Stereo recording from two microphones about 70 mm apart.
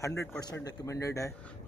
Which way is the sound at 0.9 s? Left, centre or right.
Left.